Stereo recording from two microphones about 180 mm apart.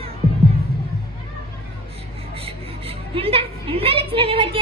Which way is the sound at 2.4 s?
30° right (ahead or behind).